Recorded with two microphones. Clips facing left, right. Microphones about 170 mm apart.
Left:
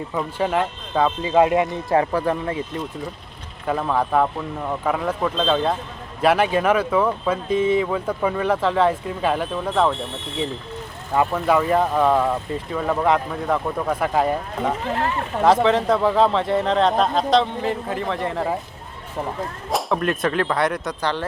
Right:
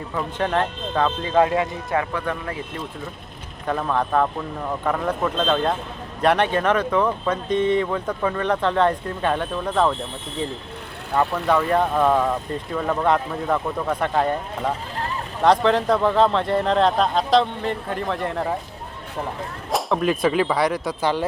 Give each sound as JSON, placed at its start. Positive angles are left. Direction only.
{"t": 0.1, "sound": "speech", "side_deg": 10}
{"t": 3.7, "sound": "speech", "side_deg": 5}
{"t": 11.1, "sound": "speech", "side_deg": 10}
{"t": 14.8, "sound": "speech", "side_deg": 75}
{"t": 15.6, "sound": "speech", "side_deg": 0}
{"t": 19.7, "sound": "speech", "side_deg": 0}